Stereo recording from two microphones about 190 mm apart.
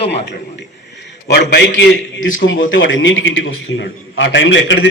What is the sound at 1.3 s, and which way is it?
A man's voice, 65° left (ahead or behind).